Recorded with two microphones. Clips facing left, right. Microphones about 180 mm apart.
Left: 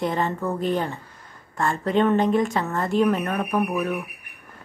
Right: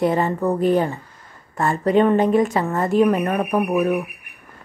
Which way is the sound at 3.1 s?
15° right (ahead or behind).